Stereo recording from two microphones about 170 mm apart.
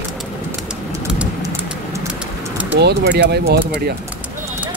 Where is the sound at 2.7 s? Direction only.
75° right (ahead or behind).